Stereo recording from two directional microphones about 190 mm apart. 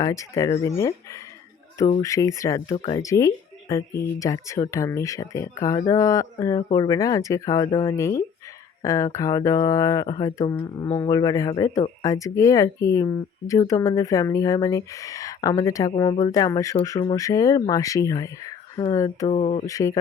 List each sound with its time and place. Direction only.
0.0 s speech: 15° left (ahead or behind)
19.3 s speech: 35° left (ahead or behind)
19.6 s speech: 15° left (ahead or behind)